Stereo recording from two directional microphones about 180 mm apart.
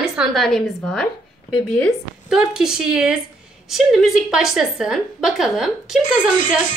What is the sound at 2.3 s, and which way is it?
A woman's voice, 5° right (ahead or behind).